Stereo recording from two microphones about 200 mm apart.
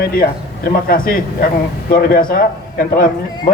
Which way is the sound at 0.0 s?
50° left (ahead or behind).